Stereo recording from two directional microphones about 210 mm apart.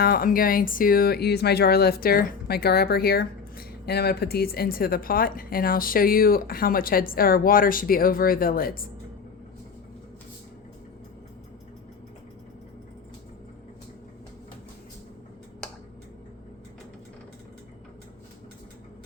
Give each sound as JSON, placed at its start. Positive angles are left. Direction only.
{"t": 0.0, "sound": "speech", "side_deg": 45}